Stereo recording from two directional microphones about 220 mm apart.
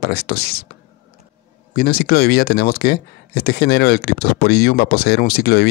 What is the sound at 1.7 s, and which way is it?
Speech, 45° left (ahead or behind).